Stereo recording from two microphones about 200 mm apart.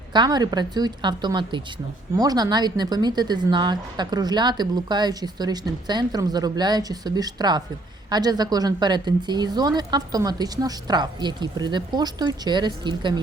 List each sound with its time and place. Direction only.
0.1 s speech: 20° right (ahead or behind)